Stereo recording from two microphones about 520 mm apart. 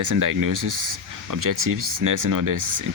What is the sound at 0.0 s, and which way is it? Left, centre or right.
Speech, right.